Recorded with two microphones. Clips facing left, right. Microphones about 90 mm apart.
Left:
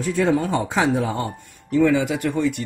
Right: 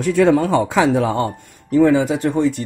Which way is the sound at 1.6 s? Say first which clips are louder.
Right 4 dB; 40° right (ahead or behind).